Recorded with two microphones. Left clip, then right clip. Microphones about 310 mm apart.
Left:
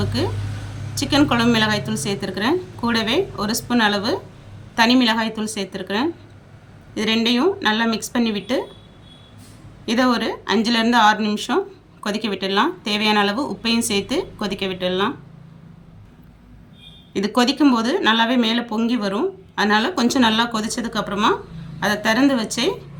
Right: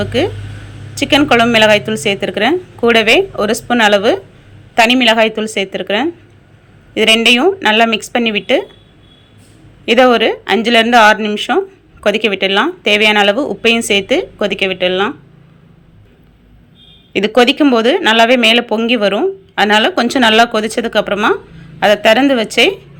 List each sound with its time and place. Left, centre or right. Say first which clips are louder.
0.0 s speech: right 9 dB; centre
9.8 s speech: right 11 dB; centre
17.1 s speech: right 9 dB; centre